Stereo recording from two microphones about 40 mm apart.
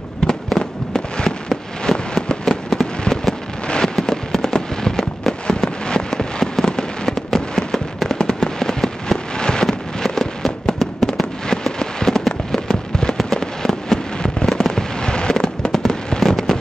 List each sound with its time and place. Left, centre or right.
0.6 s fireworks: centre